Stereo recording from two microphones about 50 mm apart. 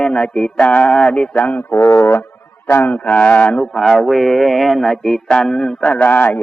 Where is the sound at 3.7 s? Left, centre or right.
Centre.